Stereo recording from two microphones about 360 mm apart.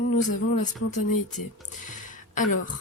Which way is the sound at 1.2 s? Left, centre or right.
Left.